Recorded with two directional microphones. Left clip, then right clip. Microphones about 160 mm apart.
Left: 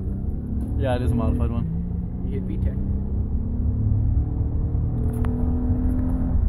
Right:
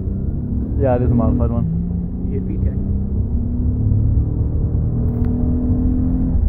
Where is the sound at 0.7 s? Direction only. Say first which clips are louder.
Right 8 dB; 5° right (ahead or behind).